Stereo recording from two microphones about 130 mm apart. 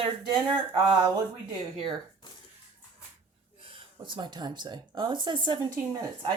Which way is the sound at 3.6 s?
40° right (ahead or behind).